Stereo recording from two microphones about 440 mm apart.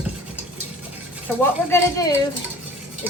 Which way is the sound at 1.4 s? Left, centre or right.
Centre.